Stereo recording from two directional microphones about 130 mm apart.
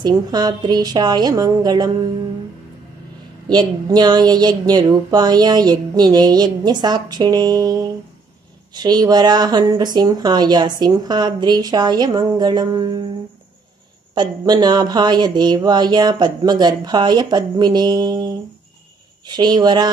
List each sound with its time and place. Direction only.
0.0 s speech: 30° right (ahead or behind)
3.4 s speech: 30° right (ahead or behind)
14.1 s speech: 35° right (ahead or behind)